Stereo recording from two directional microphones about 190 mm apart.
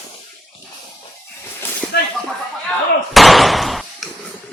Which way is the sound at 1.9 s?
55° left (ahead or behind).